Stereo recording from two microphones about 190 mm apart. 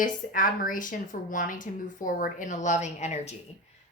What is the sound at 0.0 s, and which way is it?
A woman's voice, 45° left (ahead or behind).